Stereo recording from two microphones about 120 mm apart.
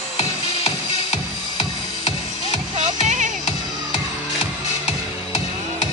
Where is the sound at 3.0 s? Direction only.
90° right.